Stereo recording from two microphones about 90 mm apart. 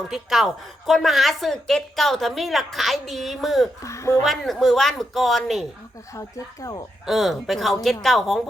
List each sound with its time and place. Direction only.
0.1 s a woman's voice: 5° right (ahead or behind)
3.8 s speech: 35° left (ahead or behind)
4.2 s a woman's voice: centre (ahead or behind)
6.1 s speech: 40° left (ahead or behind)
7.0 s a woman's voice: centre (ahead or behind)